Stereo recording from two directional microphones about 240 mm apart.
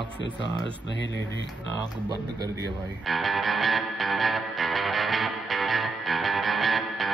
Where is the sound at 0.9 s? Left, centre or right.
Left.